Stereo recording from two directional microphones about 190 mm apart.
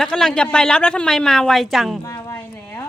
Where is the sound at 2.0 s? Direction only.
15° left (ahead or behind).